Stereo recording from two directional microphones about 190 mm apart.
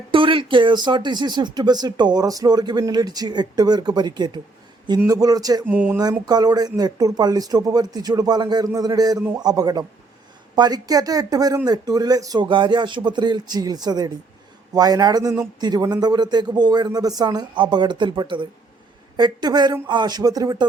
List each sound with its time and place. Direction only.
0.1 s speech: 25° right (ahead or behind)
5.7 s speech: 10° right (ahead or behind)
6.2 s speech: 20° right (ahead or behind)